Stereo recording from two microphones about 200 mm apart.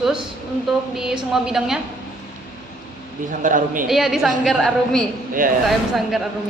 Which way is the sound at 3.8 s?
Centre (ahead or behind).